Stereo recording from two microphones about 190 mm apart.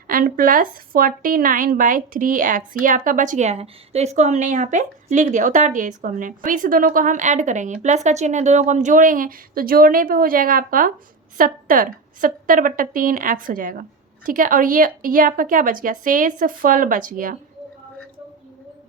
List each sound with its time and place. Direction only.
0.1 s speech: 50° right (ahead or behind)